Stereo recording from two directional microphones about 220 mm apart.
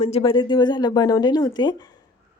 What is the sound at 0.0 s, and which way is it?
A woman's voice, 25° left (ahead or behind).